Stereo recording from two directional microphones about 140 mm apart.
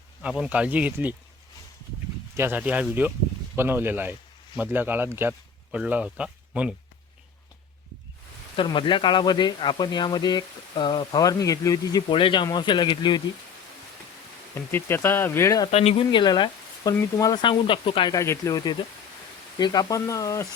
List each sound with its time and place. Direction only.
0.2 s speech: 5° right (ahead or behind)
2.3 s speech: 15° right (ahead or behind)
8.5 s speech: 35° left (ahead or behind)
14.5 s speech: 15° left (ahead or behind)
15.7 s speech: 50° left (ahead or behind)
18.1 s speech: 20° left (ahead or behind)